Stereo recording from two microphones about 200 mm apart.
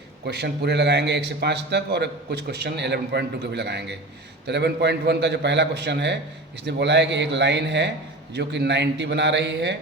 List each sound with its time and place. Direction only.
0.3 s a man's voice: 55° right (ahead or behind)